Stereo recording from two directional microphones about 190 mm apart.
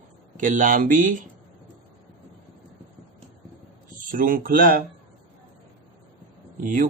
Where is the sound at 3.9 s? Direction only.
45° right (ahead or behind).